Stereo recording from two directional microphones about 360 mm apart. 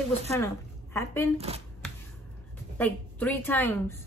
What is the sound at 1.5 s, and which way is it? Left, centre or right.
Speech, centre.